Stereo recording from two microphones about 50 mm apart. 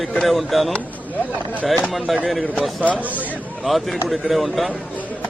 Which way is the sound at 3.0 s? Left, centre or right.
Right.